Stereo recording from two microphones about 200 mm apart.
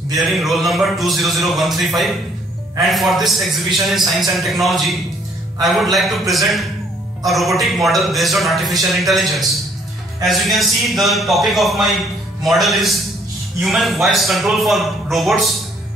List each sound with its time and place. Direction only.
0.3 s a man's voice: centre (ahead or behind)
7.2 s a man's voice: centre (ahead or behind)